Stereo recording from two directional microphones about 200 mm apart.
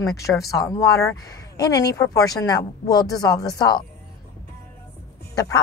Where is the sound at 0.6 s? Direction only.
15° left (ahead or behind).